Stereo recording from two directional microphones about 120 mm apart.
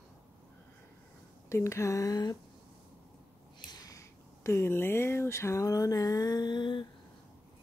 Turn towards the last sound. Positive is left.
turn(degrees=40)  # may be behind; listen again after turning